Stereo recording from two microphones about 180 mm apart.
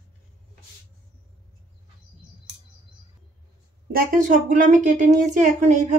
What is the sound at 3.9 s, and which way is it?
A woman's voice, 45° right (ahead or behind).